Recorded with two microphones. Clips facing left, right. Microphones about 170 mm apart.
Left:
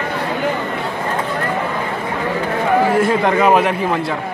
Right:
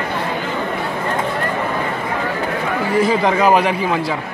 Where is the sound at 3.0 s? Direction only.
Centre (ahead or behind).